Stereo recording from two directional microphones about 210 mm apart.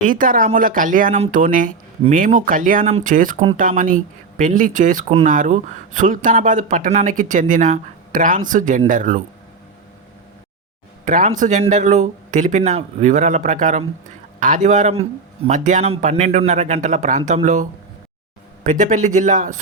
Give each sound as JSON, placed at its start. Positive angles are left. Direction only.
{"t": 0.0, "sound": "speech", "side_deg": -40}
{"t": 11.0, "sound": "speech", "side_deg": -40}